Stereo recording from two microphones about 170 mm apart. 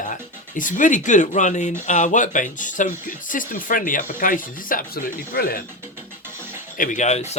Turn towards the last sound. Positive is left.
turn(degrees=40)  # may be behind; listen again after turning